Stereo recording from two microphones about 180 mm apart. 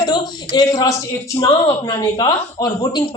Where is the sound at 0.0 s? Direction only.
25° left (ahead or behind).